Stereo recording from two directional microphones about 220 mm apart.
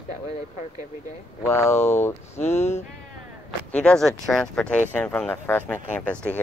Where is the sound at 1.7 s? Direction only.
30° left (ahead or behind).